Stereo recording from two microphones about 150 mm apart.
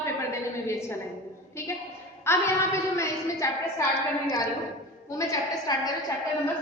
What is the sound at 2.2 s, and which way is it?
A woman's voice, 20° left (ahead or behind).